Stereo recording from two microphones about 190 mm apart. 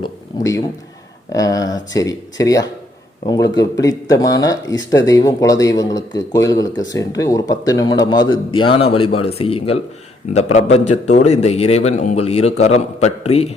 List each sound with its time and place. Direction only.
0.3 s a man's voice: 20° left (ahead or behind)